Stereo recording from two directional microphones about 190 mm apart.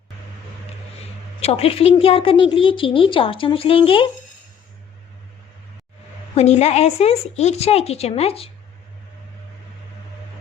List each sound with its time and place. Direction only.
1.4 s a woman's voice: 30° left (ahead or behind)
6.3 s a woman's voice: 35° left (ahead or behind)